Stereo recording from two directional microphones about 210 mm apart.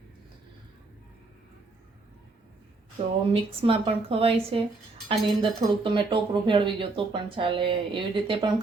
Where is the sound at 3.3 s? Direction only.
25° right (ahead or behind).